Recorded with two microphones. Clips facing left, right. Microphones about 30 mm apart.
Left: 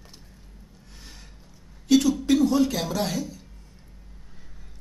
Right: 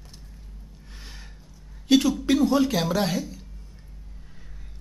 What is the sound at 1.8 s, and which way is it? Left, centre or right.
Speech, right.